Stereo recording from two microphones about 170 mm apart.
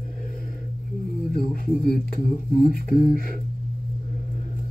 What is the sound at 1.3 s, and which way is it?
Speech, 60° left (ahead or behind).